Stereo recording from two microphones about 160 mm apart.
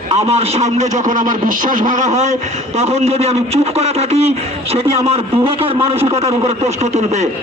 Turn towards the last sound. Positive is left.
turn(degrees=-45)  # may be behind; listen again after turning